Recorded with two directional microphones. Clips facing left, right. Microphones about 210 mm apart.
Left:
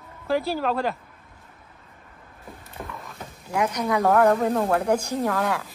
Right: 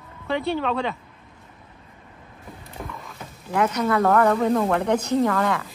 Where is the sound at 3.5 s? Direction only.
10° left (ahead or behind).